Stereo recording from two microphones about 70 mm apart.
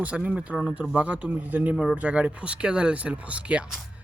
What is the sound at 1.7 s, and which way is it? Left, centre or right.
Speech, centre.